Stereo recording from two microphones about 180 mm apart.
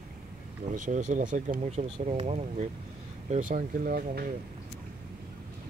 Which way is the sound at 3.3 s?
45° right (ahead or behind).